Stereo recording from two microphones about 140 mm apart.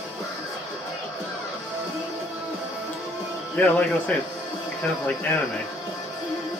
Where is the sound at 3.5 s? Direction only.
5° left (ahead or behind).